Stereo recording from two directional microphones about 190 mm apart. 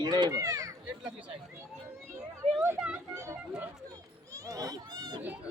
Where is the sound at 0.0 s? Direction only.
20° right (ahead or behind).